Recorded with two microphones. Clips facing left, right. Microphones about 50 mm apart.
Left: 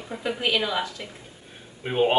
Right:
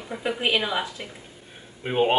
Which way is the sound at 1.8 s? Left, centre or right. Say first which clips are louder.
Even; centre.